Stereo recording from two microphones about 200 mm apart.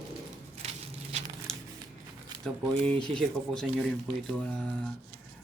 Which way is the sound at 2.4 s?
5° left (ahead or behind).